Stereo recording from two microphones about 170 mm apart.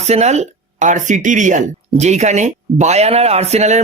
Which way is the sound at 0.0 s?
40° right (ahead or behind).